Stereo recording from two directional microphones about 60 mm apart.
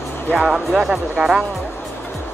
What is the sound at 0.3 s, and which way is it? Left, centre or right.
Speech, centre.